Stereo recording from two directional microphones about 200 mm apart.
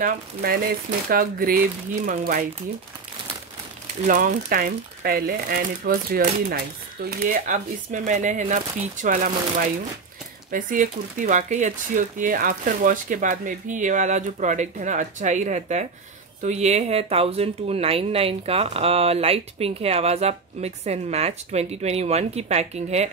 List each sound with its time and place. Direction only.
0.0 s speech: 50° right (ahead or behind)
4.0 s speech: 40° right (ahead or behind)
10.5 s speech: 40° right (ahead or behind)